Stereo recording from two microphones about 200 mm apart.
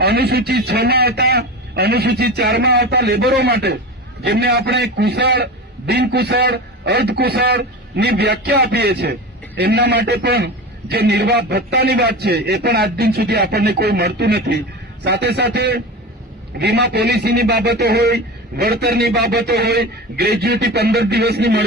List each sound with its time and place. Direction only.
0.0 s a man's voice: 55° right (ahead or behind)